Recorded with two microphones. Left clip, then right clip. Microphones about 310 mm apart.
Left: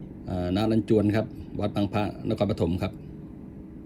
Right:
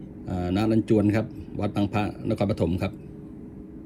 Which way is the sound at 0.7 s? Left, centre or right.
Centre.